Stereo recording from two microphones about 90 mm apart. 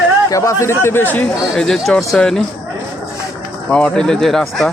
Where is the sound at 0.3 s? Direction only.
35° left (ahead or behind).